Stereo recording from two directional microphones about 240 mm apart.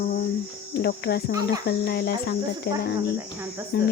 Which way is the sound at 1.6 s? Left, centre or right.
Left.